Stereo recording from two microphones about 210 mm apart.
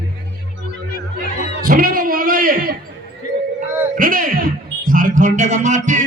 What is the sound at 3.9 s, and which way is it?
Music, 40° right (ahead or behind).